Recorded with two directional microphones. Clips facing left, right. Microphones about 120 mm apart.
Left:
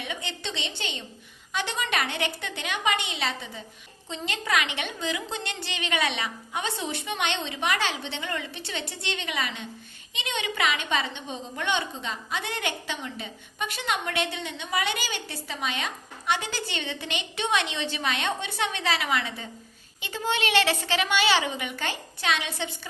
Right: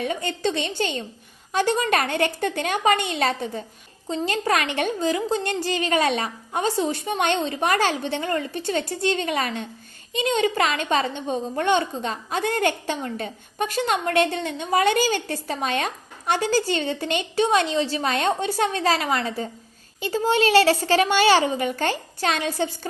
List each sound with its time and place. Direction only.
0.0 s a woman's voice: 45° right (ahead or behind)